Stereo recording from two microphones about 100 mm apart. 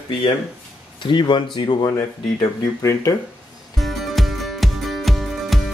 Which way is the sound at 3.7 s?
Centre (ahead or behind).